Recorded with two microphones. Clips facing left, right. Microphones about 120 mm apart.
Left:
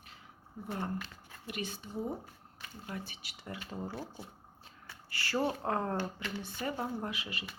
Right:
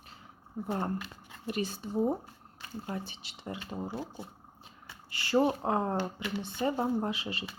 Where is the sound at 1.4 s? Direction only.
35° right (ahead or behind).